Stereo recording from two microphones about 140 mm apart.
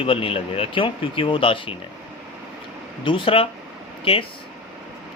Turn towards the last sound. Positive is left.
turn(degrees=40)  # may be behind; listen again after turning